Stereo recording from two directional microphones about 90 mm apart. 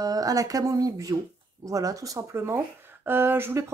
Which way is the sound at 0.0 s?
45° right (ahead or behind).